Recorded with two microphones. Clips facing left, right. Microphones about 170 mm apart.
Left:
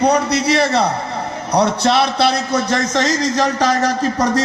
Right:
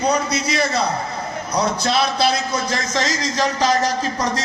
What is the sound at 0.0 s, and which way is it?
A man's voice, 65° left (ahead or behind).